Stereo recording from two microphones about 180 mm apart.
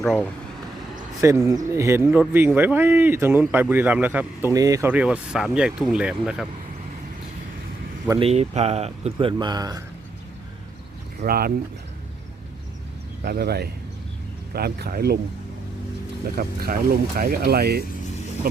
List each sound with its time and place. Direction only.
0.0 s speech: centre (ahead or behind)
1.2 s speech: 15° right (ahead or behind)
4.9 s speech: 10° right (ahead or behind)
8.2 s speech: 35° right (ahead or behind); by 9.8 s 20° right (ahead or behind)
11.2 s speech: 55° right (ahead or behind)
13.2 s speech: 60° right (ahead or behind)
16.3 s speech: 55° right (ahead or behind)